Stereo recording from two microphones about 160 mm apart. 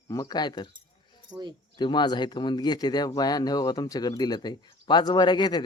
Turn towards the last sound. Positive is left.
turn(degrees=25)  # may be behind; listen again after turning